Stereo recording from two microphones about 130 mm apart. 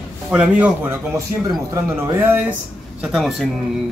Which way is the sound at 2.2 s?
15° right (ahead or behind).